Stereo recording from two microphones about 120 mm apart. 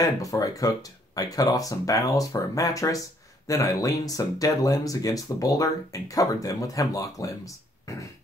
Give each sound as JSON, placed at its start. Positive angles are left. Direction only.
{"t": 0.0, "sound": "speech", "side_deg": 30}